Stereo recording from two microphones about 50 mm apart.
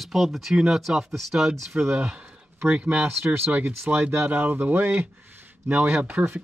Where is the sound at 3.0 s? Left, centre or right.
Right.